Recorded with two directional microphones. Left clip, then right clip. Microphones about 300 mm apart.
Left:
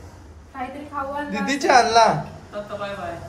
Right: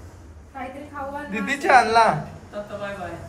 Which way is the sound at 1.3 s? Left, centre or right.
Centre.